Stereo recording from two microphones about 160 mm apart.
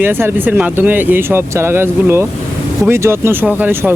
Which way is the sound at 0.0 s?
15° right (ahead or behind).